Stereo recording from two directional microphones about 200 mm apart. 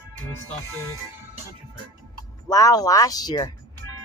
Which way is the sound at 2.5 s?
20° left (ahead or behind).